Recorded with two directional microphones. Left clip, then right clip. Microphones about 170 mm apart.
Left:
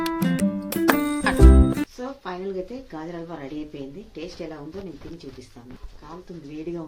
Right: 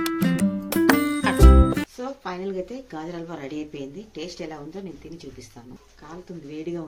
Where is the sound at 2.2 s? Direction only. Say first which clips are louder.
Even; 20° right (ahead or behind).